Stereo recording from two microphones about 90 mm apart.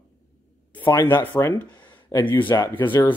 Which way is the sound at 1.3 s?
5° left (ahead or behind).